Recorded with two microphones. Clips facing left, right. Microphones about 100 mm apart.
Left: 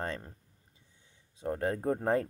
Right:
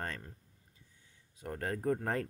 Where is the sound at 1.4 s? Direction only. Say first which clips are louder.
Left 6 dB; 25° left (ahead or behind).